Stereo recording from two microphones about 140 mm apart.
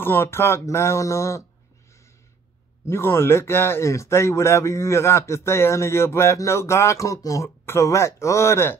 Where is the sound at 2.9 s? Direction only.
15° left (ahead or behind).